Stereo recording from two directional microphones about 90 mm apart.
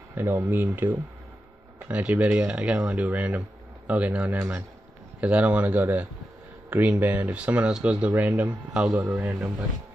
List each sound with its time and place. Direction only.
0.1 s speech: 25° right (ahead or behind)
4.4 s speech: 25° right (ahead or behind)
5.2 s speech: 15° right (ahead or behind)